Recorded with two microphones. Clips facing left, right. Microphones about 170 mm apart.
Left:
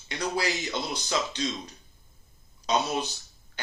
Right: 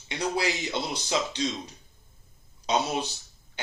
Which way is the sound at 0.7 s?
30° right (ahead or behind).